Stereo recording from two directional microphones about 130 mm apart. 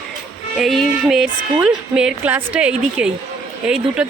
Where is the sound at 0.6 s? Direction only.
Centre (ahead or behind).